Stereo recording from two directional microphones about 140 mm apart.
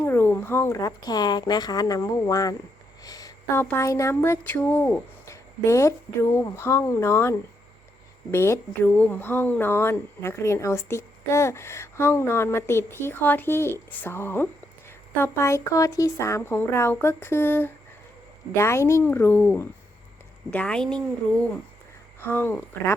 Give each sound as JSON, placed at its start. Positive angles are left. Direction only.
{"t": 0.0, "sound": "speech", "side_deg": 15}
{"t": 3.0, "sound": "a sound", "side_deg": 25}
{"t": 3.6, "sound": "speech", "side_deg": 15}
{"t": 22.2, "sound": "speech", "side_deg": 15}